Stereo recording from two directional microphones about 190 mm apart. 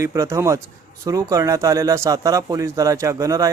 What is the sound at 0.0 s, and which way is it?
Speech, 15° right (ahead or behind).